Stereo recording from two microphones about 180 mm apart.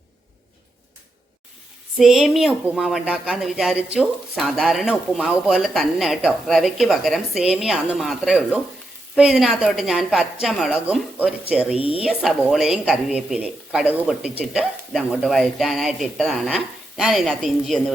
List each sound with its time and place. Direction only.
2.0 s speech: centre (ahead or behind)
11.8 s a woman's voice: 30° left (ahead or behind)
12.0 s speech: centre (ahead or behind)